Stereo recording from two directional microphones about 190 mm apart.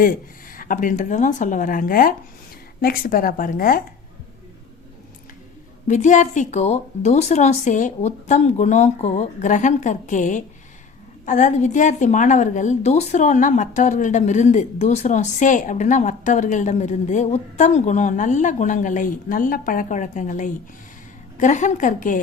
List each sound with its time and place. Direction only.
0.0 s speech: 45° left (ahead or behind)
5.9 s a woman's voice: 40° left (ahead or behind)